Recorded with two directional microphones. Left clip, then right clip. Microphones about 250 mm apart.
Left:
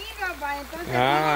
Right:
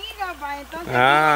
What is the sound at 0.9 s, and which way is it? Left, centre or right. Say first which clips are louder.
Speech: right 6 dB; centre.